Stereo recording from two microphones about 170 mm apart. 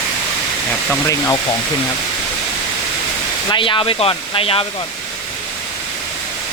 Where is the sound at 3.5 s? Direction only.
30° left (ahead or behind).